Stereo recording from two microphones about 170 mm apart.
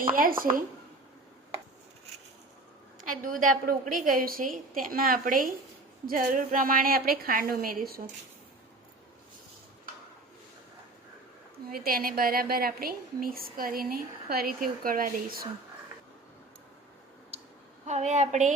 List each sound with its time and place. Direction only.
0.2 s a woman's voice: 55° right (ahead or behind)
3.0 s a woman's voice: 50° right (ahead or behind)
11.7 s a woman's voice: 60° right (ahead or behind)
17.3 s clicking: 35° right (ahead or behind)
17.8 s a woman's voice: 45° right (ahead or behind)